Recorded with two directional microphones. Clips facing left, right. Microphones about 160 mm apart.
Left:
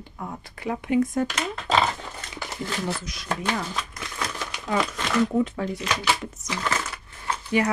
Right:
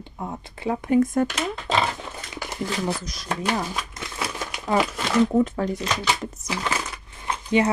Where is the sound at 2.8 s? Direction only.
40° right (ahead or behind).